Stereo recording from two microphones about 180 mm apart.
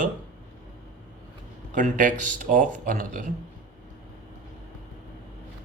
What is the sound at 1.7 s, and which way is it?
Speech, 45° right (ahead or behind).